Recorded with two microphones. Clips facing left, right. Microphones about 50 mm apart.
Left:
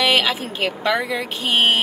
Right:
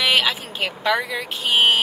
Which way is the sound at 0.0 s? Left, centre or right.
Centre.